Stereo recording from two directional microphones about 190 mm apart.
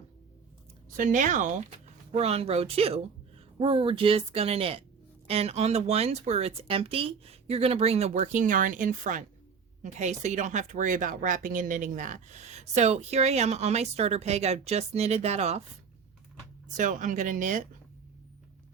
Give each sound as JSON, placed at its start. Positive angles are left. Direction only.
{"t": 0.9, "sound": "speech", "side_deg": -40}
{"t": 16.7, "sound": "speech", "side_deg": -40}